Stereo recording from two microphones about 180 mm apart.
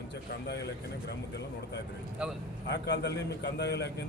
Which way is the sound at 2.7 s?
70° left (ahead or behind).